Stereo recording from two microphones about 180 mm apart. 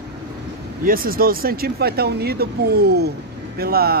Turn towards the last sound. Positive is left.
turn(degrees=-60)  # may be behind; listen again after turning